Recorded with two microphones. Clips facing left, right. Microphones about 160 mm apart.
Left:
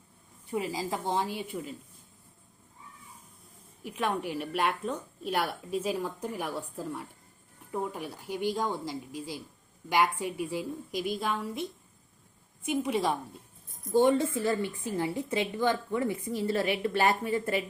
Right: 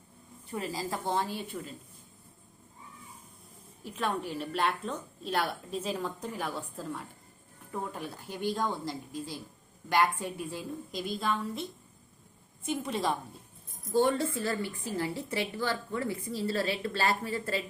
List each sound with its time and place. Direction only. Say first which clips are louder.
0.5 s a woman's voice: left 3 dB; 15° left (ahead or behind)
3.8 s a woman's voice: left 2 dB; 15° left (ahead or behind)
12.6 s a woman's voice: left 3 dB; 15° left (ahead or behind)